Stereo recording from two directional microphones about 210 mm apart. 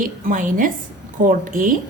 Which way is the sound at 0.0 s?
40° right (ahead or behind).